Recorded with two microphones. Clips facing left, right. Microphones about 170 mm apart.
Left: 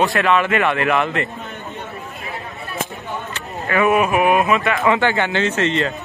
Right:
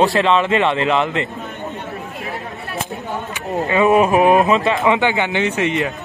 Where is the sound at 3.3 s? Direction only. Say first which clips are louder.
Right 3 dB; 20° right (ahead or behind).